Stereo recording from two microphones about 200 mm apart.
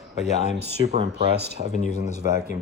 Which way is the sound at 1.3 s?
55° right (ahead or behind).